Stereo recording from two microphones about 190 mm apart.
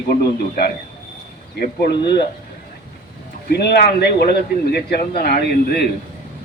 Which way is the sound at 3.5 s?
60° left (ahead or behind).